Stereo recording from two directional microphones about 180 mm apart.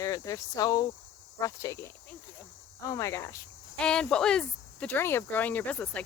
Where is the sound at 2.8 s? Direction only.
20° left (ahead or behind).